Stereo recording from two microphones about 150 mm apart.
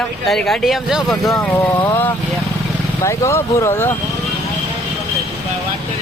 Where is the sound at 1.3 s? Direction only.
15° left (ahead or behind).